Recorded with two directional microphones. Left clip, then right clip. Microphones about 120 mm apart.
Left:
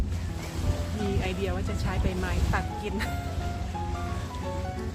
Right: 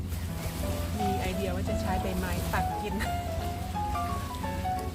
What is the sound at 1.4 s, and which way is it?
Music, 20° left (ahead or behind).